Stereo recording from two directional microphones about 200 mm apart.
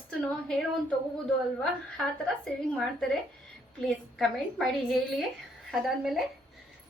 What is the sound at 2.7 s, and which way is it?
A woman's voice, centre (ahead or behind).